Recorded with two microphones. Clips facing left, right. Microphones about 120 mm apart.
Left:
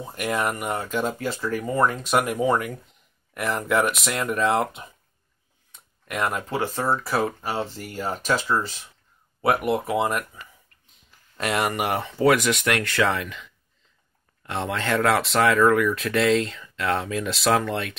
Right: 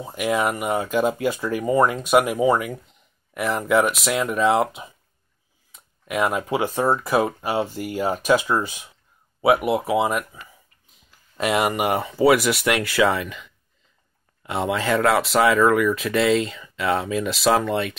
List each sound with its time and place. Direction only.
0.0 s speech: 5° right (ahead or behind)
5.7 s a sound: 5° right (ahead or behind)
6.5 s speech: 15° right (ahead or behind)
9.4 s speech: 5° right (ahead or behind)